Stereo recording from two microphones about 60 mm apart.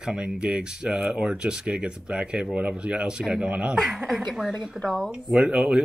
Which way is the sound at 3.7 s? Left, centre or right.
Centre.